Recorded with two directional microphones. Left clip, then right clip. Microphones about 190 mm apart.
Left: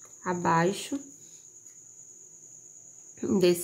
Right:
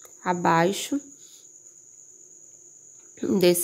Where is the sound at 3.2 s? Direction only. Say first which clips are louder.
Right 4 dB; 30° right (ahead or behind).